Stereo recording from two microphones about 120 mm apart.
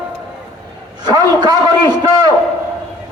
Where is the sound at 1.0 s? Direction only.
35° right (ahead or behind).